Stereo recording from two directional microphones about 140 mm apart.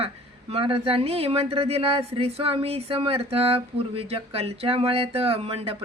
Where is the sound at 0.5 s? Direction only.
40° right (ahead or behind).